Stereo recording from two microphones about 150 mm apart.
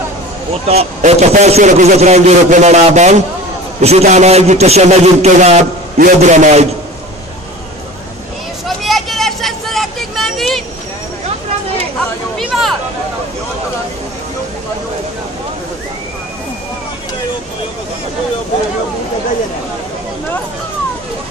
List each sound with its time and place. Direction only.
0.7 s a man's voice: 45° right (ahead or behind)
5.9 s a man's voice: 55° right (ahead or behind)
8.6 s vehicle: centre (ahead or behind)
12.4 s a sound: centre (ahead or behind)